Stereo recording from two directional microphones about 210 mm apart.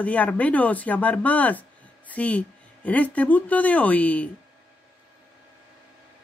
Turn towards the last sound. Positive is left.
turn(degrees=5)  # may be behind; listen again after turning